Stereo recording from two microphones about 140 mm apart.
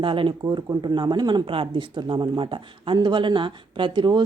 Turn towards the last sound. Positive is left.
turn(degrees=-35)  # may be behind; listen again after turning